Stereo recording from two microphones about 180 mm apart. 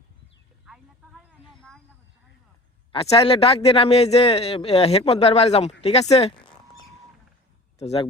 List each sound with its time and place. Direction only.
0.6 s a sound: centre (ahead or behind)
2.9 s a man's voice: 30° left (ahead or behind)
7.8 s speech: 35° left (ahead or behind)